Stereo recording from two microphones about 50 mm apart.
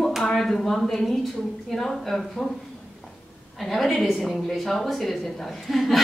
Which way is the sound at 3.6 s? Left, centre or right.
Centre.